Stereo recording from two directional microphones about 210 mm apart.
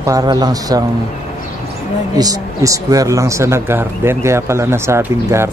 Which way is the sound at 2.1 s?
15° right (ahead or behind).